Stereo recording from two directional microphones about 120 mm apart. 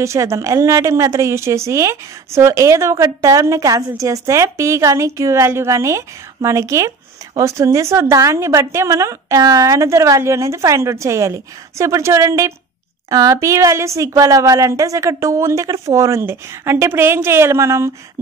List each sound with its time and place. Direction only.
0.0 s speech: 25° right (ahead or behind)